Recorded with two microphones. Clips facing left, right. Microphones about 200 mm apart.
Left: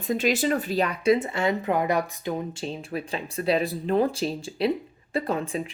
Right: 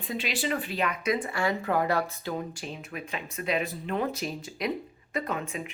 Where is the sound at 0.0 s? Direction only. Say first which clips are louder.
Left 8 dB; 45° left (ahead or behind).